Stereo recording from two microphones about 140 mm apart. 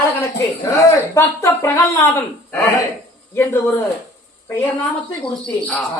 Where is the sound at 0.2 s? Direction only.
25° left (ahead or behind).